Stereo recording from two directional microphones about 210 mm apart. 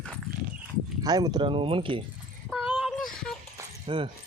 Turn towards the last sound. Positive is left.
turn(degrees=-25)  # may be behind; listen again after turning